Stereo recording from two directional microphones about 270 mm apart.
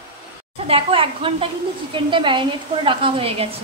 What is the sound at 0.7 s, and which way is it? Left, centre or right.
A woman's voice, centre.